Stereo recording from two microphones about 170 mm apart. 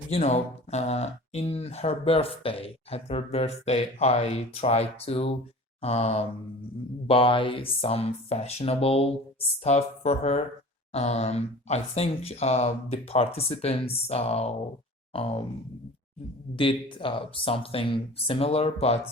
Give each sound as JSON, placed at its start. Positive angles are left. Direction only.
{"t": 0.1, "sound": "speech", "side_deg": 40}
{"t": 16.6, "sound": "speech", "side_deg": 30}